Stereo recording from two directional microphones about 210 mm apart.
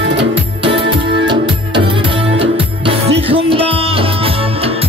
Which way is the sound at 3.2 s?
25° right (ahead or behind).